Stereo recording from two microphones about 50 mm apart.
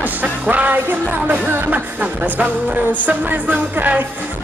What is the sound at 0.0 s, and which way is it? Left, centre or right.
Music, right.